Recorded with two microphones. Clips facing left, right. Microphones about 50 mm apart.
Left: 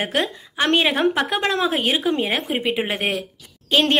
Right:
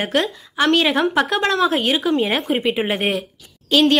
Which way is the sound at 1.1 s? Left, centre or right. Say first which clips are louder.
Right 3 dB; centre.